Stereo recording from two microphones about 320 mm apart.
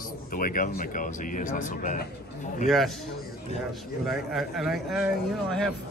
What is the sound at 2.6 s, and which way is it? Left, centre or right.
A man's voice, centre.